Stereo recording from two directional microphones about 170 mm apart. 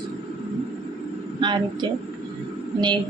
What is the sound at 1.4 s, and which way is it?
Speech, 25° right (ahead or behind).